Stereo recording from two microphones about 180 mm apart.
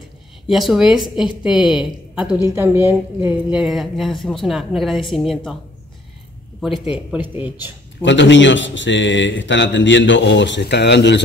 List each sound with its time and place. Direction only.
0.5 s a woman's voice: centre (ahead or behind)
6.6 s a woman's voice: centre (ahead or behind)
8.0 s a man's voice: 85° left